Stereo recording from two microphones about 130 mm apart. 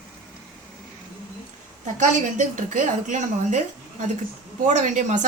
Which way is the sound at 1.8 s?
75° right (ahead or behind).